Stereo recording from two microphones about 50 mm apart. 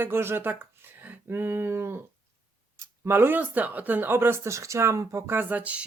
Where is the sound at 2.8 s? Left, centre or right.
Right.